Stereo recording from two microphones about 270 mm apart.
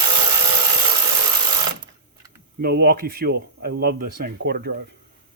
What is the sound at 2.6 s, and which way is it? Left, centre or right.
Speech, right.